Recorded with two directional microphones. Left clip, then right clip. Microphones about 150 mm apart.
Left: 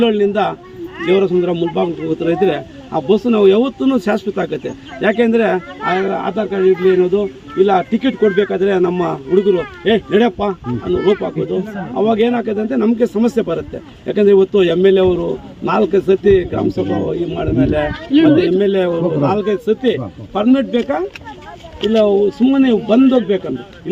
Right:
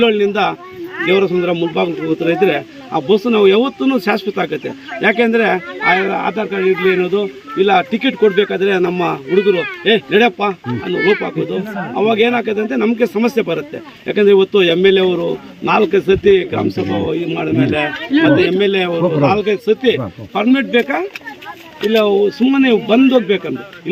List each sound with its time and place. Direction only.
0.0 s a man's voice: 35° left (ahead or behind); by 17.9 s 15° left (ahead or behind)
18.1 s speech: 30° right (ahead or behind)
18.6 s a man's voice: 15° left (ahead or behind)
22.4 s speech: 25° left (ahead or behind)